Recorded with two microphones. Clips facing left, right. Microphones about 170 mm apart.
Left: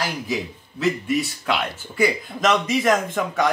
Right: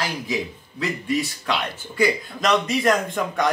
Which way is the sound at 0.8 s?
5° left (ahead or behind).